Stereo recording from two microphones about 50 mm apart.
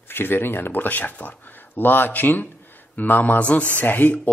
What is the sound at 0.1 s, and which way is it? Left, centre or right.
A man's voice, left.